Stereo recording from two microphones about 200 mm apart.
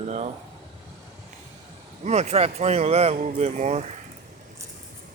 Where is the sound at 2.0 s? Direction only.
35° right (ahead or behind).